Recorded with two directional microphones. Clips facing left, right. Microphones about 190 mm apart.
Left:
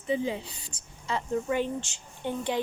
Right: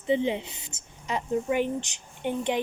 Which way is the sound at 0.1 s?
25° right (ahead or behind).